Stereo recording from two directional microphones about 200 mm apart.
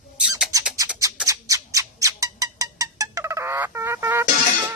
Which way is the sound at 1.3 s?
15° right (ahead or behind).